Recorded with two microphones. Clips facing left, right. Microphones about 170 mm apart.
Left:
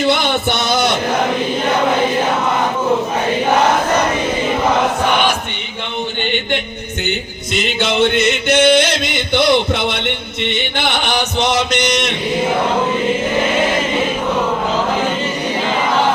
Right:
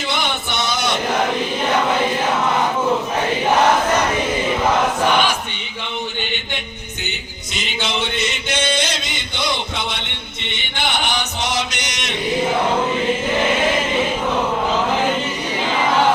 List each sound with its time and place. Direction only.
7.8 s a sound: 60° left (ahead or behind)
9.3 s music: 65° left (ahead or behind)
11.3 s mantra: 60° left (ahead or behind)